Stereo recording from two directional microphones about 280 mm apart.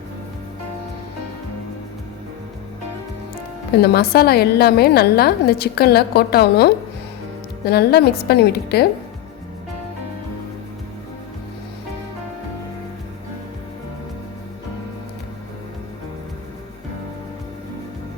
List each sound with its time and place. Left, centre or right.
3.8 s a woman's voice: left